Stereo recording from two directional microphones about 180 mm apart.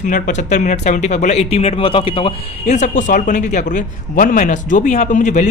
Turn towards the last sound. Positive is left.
turn(degrees=45)  # may be behind; listen again after turning